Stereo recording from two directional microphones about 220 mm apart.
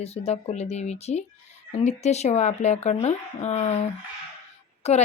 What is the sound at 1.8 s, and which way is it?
Speech, 30° left (ahead or behind).